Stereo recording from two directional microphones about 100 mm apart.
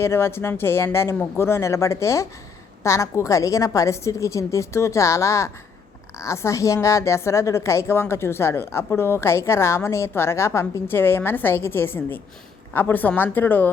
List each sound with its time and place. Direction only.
0.0 s a woman's voice: 25° left (ahead or behind)